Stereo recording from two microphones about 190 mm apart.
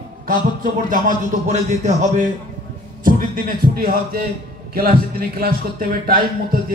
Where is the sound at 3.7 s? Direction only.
50° right (ahead or behind).